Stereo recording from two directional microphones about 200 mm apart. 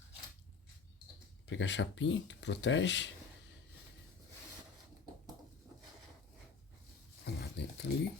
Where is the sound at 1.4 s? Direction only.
65° left (ahead or behind).